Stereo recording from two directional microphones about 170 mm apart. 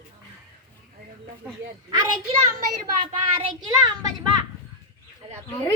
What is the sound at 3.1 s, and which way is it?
Child singing, 30° right (ahead or behind).